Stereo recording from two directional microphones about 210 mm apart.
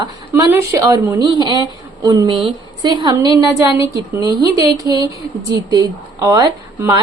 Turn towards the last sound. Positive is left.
turn(degrees=-15)  # may be behind; listen again after turning